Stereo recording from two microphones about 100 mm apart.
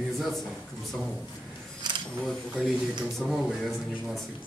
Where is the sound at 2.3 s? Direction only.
Centre (ahead or behind).